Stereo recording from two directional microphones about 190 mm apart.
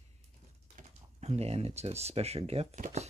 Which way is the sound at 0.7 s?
35° right (ahead or behind).